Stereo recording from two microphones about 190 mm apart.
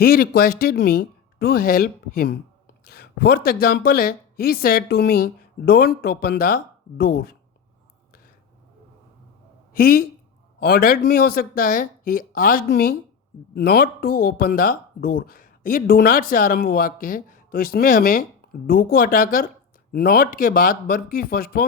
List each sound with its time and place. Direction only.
0.0 s speech: 50° left (ahead or behind)
9.7 s speech: 50° left (ahead or behind)